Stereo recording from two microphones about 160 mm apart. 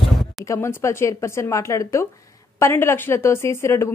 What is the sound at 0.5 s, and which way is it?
Speech, 15° left (ahead or behind).